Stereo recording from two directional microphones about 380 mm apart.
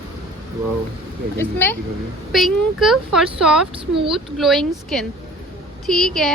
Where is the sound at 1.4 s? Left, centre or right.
Centre.